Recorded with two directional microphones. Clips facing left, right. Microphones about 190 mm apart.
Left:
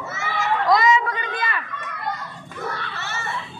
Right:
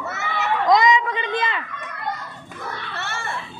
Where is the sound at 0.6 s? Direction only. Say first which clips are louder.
Right 2 dB; 20° right (ahead or behind).